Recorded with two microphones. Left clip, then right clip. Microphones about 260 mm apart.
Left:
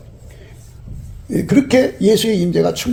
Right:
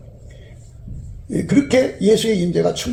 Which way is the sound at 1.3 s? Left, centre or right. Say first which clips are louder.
Left 2 dB; left.